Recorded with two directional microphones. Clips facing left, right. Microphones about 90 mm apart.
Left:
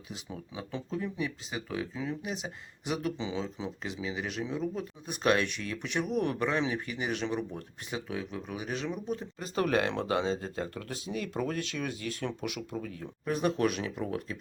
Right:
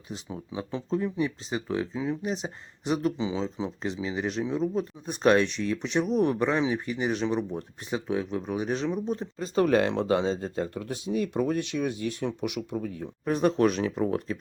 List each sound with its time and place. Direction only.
0.5 s speech: 30° right (ahead or behind)